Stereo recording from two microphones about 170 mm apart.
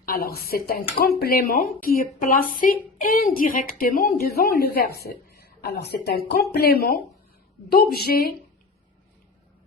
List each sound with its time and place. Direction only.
0.0 s a woman's voice: 60° left (ahead or behind)
5.0 s a sound: 65° left (ahead or behind)
6.1 s a woman's voice: 65° left (ahead or behind)